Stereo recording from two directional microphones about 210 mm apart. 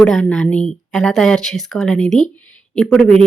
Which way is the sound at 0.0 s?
5° left (ahead or behind).